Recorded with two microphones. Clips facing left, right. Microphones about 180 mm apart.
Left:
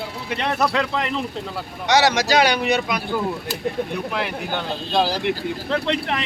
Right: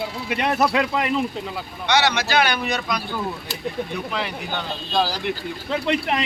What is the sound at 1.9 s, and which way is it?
Speech, 35° left (ahead or behind).